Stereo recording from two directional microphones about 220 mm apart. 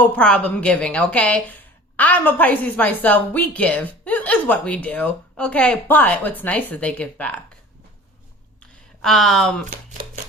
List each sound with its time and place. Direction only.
0.0 s a woman's voice: 5° left (ahead or behind)
9.0 s a woman's voice: centre (ahead or behind)
10.0 s a sound: 20° right (ahead or behind)